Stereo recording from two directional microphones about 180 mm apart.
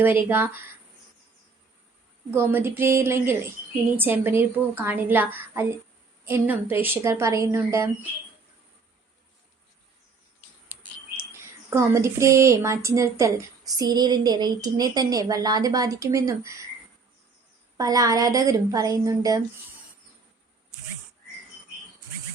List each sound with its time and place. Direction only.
0.0 s a woman's voice: 10° right (ahead or behind)
2.3 s a woman's voice: 10° right (ahead or behind)
11.3 s a woman's voice: 15° right (ahead or behind)
17.7 s a woman's voice: 20° right (ahead or behind)